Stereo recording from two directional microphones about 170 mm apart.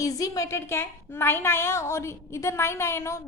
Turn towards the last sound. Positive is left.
turn(degrees=15)  # may be behind; listen again after turning